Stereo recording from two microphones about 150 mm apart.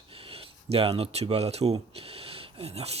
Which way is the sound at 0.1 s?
40° right (ahead or behind).